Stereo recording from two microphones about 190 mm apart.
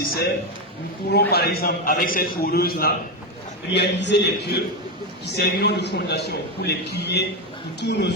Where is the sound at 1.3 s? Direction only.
55° left (ahead or behind).